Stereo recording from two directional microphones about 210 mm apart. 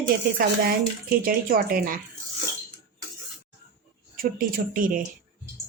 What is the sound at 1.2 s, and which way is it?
Speech, 45° right (ahead or behind).